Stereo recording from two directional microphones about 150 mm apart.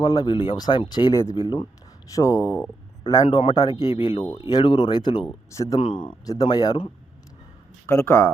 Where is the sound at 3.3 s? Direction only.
35° left (ahead or behind).